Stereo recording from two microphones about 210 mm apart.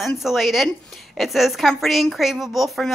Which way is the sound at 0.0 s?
Centre (ahead or behind).